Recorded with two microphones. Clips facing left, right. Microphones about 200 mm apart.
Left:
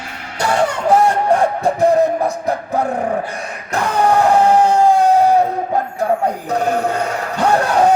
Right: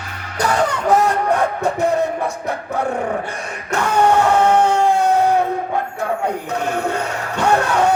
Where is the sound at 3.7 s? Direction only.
35° left (ahead or behind).